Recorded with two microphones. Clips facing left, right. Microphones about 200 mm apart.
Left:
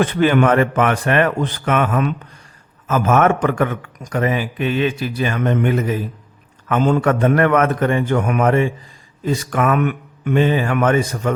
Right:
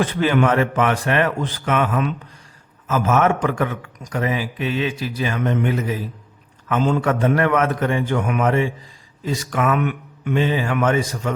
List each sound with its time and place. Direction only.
0.0 s a man's voice: 60° left (ahead or behind)